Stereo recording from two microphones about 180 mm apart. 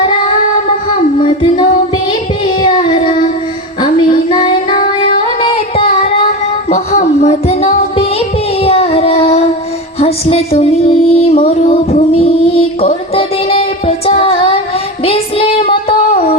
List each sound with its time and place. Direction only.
1.2 s music: 30° left (ahead or behind)
2.0 s child singing: 25° left (ahead or behind)
3.8 s female singing: 25° left (ahead or behind)
6.7 s music: 40° left (ahead or behind)
8.5 s child singing: 35° left (ahead or behind)
10.0 s music: 35° left (ahead or behind)
15.0 s child singing: 30° left (ahead or behind)